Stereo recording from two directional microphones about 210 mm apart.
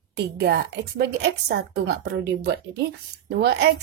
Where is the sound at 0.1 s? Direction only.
50° right (ahead or behind).